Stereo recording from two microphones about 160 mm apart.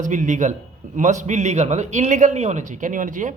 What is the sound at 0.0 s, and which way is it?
A man's voice, 50° right (ahead or behind).